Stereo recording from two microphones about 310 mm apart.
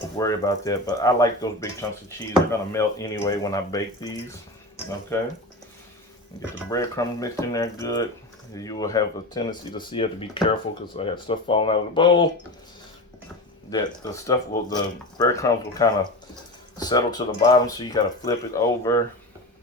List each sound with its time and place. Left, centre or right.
0.2 s speech: centre
5.1 s speech: centre
6.7 s speech: centre
13.7 s speech: centre